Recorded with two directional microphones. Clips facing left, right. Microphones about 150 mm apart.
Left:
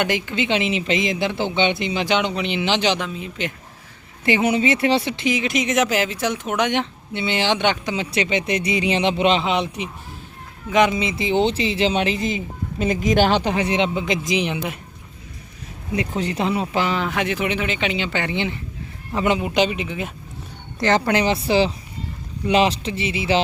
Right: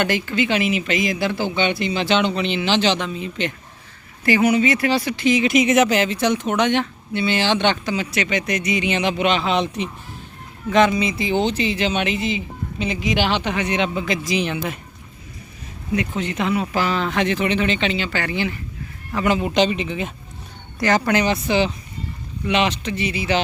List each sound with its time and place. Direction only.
0.0 s speech: 15° left (ahead or behind)
3.1 s speech: centre (ahead or behind)
4.2 s speech: 20° left (ahead or behind)
5.4 s speech: 5° right (ahead or behind); by 7.9 s 15° left (ahead or behind)
7.9 s speech: 30° left (ahead or behind)
9.5 s speech: 10° left (ahead or behind)
10.9 s speech: 25° left (ahead or behind)
16.0 s speech: 35° left (ahead or behind)
16.8 s speech: 15° left (ahead or behind)
19.4 s speech: 10° left (ahead or behind)
20.7 s speech: 25° left (ahead or behind)